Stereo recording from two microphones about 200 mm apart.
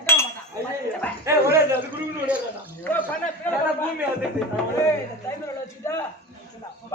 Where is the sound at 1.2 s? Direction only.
15° right (ahead or behind).